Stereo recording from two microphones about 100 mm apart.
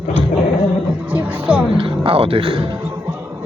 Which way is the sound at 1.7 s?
65° right (ahead or behind).